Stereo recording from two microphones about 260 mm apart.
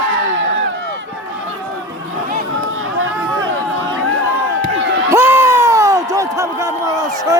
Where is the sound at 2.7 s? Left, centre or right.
Right.